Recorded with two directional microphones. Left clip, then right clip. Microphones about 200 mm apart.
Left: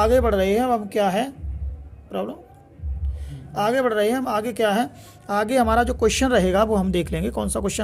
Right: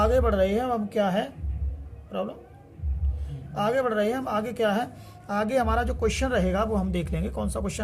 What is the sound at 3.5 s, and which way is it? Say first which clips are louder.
Speech: left 4 dB; 40° left (ahead or behind).